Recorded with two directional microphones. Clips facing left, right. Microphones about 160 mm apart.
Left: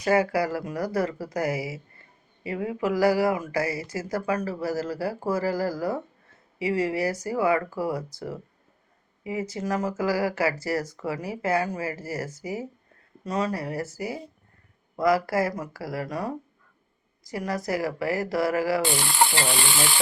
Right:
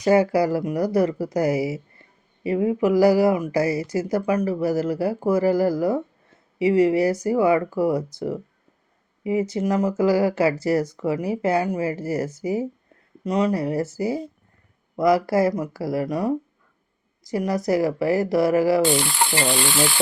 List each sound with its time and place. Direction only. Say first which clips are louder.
0.0 s speech: right 5 dB; 20° right (ahead or behind)
9.2 s speech: right 7 dB; 20° right (ahead or behind)